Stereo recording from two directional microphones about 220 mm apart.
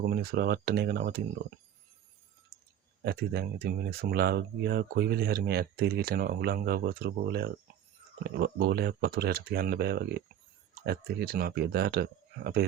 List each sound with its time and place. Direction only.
0.0 s speech: 45° right (ahead or behind)
3.0 s speech: 45° right (ahead or behind)